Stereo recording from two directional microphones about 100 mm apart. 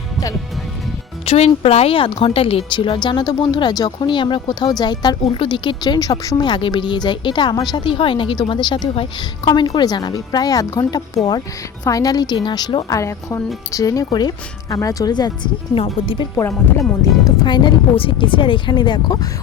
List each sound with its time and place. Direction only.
1.2 s a woman's voice: 75° left (ahead or behind); by 7.9 s 45° left (ahead or behind)
7.9 s a woman's voice: 60° left (ahead or behind)
13.0 s speech: 30° left (ahead or behind)
15.7 s speech: 65° left (ahead or behind)
16.3 s speech: 25° left (ahead or behind)
17.4 s a woman's voice: 50° left (ahead or behind)